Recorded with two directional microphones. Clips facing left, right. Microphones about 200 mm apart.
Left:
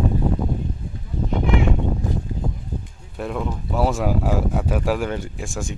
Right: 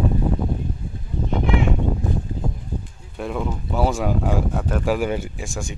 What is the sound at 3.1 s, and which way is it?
Speech, centre (ahead or behind).